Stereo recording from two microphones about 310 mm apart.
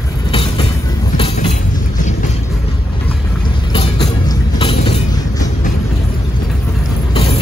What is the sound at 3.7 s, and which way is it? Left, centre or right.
Music, centre.